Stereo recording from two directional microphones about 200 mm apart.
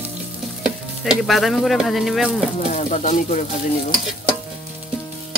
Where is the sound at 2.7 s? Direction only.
35° left (ahead or behind).